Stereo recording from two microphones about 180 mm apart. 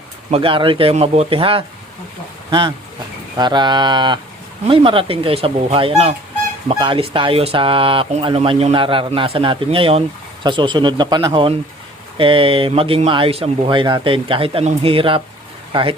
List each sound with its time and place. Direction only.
0.3 s speech: 30° right (ahead or behind)